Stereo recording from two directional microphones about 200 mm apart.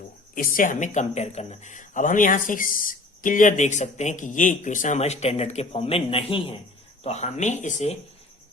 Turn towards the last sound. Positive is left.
turn(degrees=35)  # may be behind; listen again after turning